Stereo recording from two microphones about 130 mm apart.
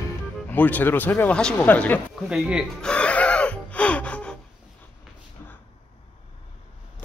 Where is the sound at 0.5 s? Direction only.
15° left (ahead or behind).